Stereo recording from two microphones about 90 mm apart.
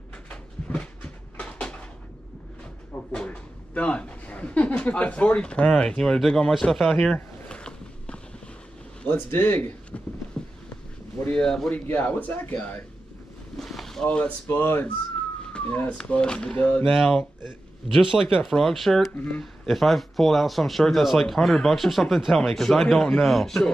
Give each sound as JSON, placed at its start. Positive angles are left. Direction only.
{"t": 0.7, "sound": "a sound", "side_deg": 15}
{"t": 3.1, "sound": "speech", "side_deg": 15}
{"t": 7.4, "sound": "mechanisms", "side_deg": 10}
{"t": 9.1, "sound": "speech", "side_deg": 25}
{"t": 10.4, "sound": "a sound", "side_deg": 10}
{"t": 11.2, "sound": "speech", "side_deg": 10}
{"t": 11.7, "sound": "speech", "side_deg": 15}
{"t": 13.6, "sound": "boat", "side_deg": 5}
{"t": 14.0, "sound": "speech", "side_deg": 15}
{"t": 16.8, "sound": "speech", "side_deg": 0}
{"t": 19.1, "sound": "speech", "side_deg": 15}
{"t": 19.6, "sound": "speech", "side_deg": 0}